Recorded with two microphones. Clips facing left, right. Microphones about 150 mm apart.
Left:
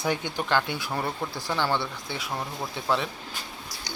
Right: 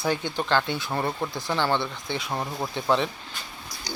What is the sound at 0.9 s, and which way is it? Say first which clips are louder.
Speech: right 3 dB; 10° right (ahead or behind).